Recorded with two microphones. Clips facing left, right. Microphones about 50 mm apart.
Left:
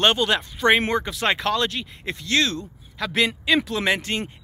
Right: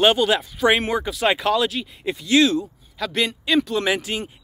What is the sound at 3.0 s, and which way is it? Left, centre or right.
Speech, centre.